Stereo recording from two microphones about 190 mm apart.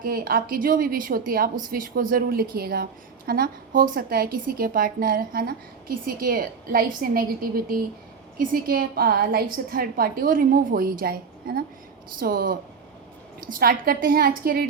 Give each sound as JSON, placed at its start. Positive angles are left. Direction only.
{"t": 0.0, "sound": "a woman's voice", "side_deg": -50}